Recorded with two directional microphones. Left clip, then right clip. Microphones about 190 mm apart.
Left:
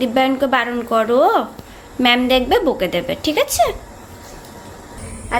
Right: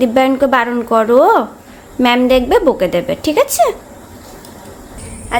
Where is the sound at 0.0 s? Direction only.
25° right (ahead or behind).